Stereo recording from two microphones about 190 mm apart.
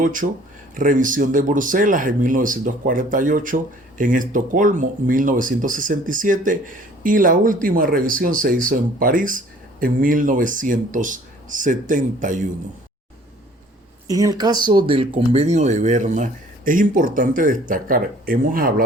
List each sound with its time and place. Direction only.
0.0 s speech: 45° right (ahead or behind)
14.1 s speech: 20° right (ahead or behind); by 18.7 s 50° right (ahead or behind)